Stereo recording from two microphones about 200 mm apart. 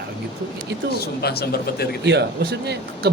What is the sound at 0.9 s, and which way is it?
A man's voice, 50° left (ahead or behind).